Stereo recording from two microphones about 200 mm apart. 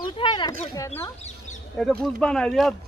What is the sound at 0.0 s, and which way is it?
Speech, 20° left (ahead or behind).